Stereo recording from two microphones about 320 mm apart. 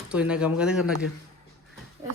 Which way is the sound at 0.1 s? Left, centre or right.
Centre.